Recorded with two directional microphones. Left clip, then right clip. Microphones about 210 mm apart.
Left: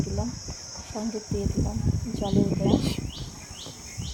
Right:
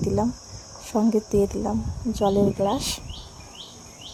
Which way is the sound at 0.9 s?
35° right (ahead or behind).